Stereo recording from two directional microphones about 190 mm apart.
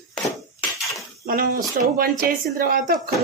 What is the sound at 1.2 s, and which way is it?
Speech, 50° right (ahead or behind).